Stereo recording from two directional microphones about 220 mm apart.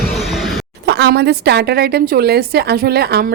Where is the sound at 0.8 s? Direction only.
50° right (ahead or behind).